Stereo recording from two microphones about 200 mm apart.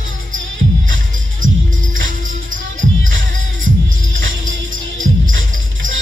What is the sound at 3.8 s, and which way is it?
Music, 75° right (ahead or behind).